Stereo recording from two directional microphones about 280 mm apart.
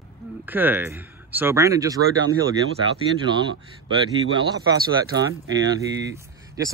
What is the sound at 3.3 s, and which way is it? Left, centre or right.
Speech, centre.